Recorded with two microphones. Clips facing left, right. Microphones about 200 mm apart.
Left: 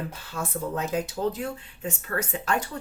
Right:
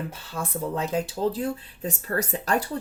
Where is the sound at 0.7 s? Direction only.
30° right (ahead or behind).